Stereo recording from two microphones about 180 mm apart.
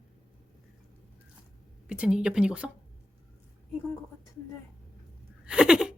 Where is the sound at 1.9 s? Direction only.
5° right (ahead or behind).